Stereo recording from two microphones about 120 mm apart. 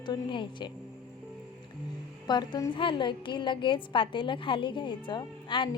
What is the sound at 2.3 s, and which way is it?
A woman's voice, 35° left (ahead or behind).